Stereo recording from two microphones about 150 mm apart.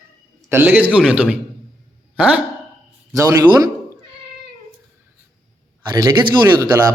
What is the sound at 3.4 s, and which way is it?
Speech, 25° right (ahead or behind).